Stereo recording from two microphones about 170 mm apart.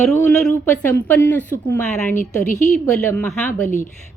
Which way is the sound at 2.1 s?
50° left (ahead or behind).